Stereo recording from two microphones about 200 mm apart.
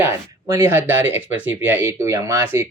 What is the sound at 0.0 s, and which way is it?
Speech, 15° right (ahead or behind).